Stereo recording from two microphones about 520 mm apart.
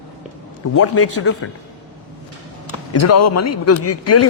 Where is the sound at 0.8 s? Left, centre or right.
Left.